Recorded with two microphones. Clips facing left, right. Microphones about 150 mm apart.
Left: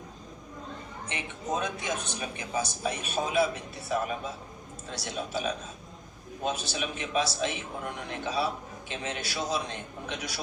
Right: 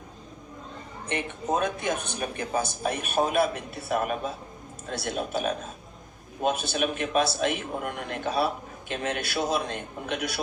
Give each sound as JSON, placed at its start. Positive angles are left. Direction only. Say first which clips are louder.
{"t": 1.0, "sound": "a man's voice", "louder": "right 6 dB", "side_deg": -55}